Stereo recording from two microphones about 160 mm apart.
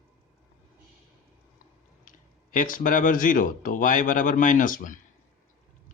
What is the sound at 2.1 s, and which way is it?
Speech, 55° left (ahead or behind).